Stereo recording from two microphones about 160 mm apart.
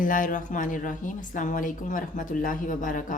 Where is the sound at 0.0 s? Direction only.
55° left (ahead or behind).